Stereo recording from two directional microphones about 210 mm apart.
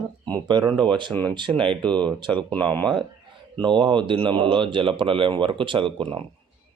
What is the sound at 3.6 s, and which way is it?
Speech, 20° right (ahead or behind).